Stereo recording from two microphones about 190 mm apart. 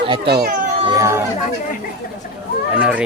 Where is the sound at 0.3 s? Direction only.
55° right (ahead or behind).